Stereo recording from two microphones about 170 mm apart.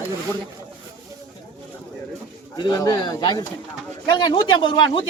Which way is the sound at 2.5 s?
25° left (ahead or behind).